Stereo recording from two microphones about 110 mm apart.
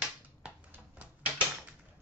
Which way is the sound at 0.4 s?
15° right (ahead or behind).